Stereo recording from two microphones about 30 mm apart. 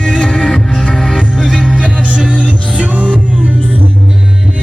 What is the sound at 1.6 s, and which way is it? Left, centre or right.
Music, right.